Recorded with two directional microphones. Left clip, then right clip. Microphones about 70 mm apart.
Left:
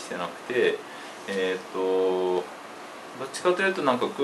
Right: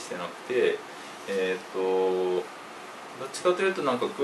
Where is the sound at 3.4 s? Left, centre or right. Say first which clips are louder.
Left 1 dB; left.